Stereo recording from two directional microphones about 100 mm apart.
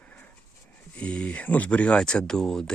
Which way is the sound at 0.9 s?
10° left (ahead or behind).